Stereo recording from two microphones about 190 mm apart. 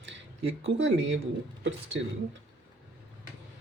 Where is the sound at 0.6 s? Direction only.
75° right (ahead or behind).